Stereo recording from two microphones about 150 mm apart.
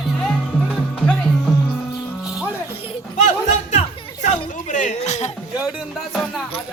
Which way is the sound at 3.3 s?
50° left (ahead or behind).